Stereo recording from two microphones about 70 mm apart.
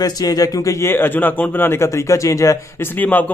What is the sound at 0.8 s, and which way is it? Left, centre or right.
A man's voice, left.